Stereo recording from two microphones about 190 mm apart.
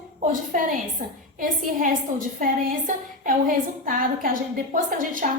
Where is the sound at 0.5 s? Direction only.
45° right (ahead or behind).